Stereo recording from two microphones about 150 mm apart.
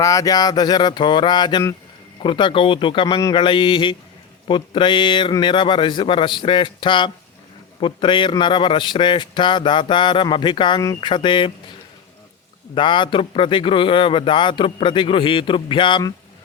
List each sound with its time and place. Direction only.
0.0 s mantra: 20° left (ahead or behind)
2.2 s a man's voice: 35° left (ahead or behind)
12.7 s a man's voice: 35° left (ahead or behind)